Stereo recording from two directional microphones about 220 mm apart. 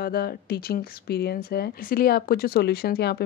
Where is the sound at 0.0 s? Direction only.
45° left (ahead or behind).